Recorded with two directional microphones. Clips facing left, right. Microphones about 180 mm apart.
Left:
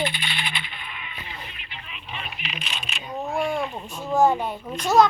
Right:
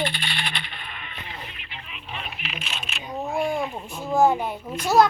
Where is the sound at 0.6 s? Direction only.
50° right (ahead or behind).